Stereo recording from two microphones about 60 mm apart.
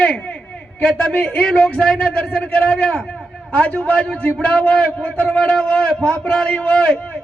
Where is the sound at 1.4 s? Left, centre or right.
Centre.